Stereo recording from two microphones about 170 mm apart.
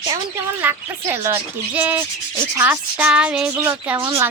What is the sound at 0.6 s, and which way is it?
A woman's voice, 15° right (ahead or behind).